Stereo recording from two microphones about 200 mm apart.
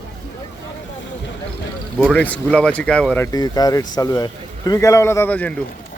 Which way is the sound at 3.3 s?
20° left (ahead or behind).